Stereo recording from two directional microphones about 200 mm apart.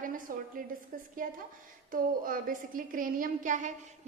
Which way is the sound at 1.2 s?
45° right (ahead or behind).